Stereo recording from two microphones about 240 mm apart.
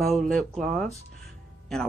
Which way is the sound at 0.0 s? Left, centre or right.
Centre.